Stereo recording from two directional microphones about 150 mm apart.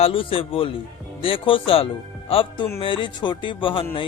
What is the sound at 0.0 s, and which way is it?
Speech, 35° left (ahead or behind).